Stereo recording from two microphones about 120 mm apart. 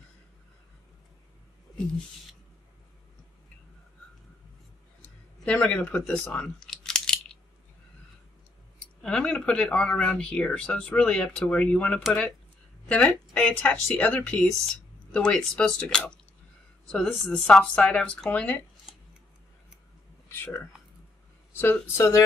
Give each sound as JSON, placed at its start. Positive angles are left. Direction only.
{"t": 5.0, "sound": "speech", "side_deg": 10}
{"t": 6.2, "sound": "a sound", "side_deg": 10}
{"t": 9.0, "sound": "speech", "side_deg": 5}
{"t": 20.3, "sound": "speech", "side_deg": 20}